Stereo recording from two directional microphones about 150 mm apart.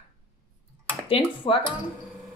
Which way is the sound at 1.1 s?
40° left (ahead or behind).